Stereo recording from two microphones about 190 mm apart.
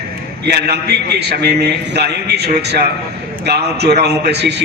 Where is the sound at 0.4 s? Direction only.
60° right (ahead or behind).